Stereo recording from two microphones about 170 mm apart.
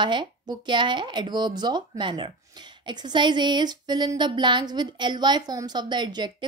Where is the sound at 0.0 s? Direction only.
25° right (ahead or behind).